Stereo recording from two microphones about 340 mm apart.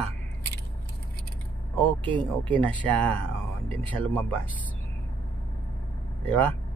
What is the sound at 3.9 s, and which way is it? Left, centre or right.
Speech, centre.